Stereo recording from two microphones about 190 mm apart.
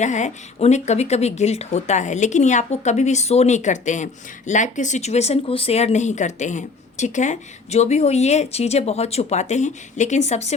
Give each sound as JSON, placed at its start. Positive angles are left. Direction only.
{"t": 0.0, "sound": "a woman's voice", "side_deg": 40}